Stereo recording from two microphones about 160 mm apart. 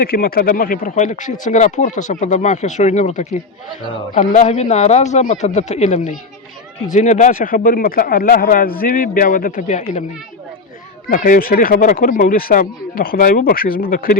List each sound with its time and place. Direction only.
0.0 s speech: 70° left (ahead or behind); by 10.0 s 50° left (ahead or behind)
11.1 s speech: 60° left (ahead or behind)